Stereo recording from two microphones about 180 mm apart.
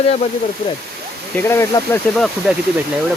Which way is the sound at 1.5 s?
15° left (ahead or behind).